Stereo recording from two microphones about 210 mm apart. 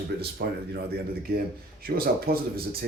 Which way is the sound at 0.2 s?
50° right (ahead or behind).